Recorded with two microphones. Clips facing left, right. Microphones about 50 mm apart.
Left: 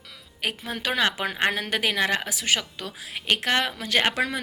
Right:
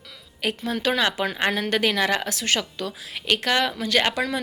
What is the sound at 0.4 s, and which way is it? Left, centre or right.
A woman's voice, centre.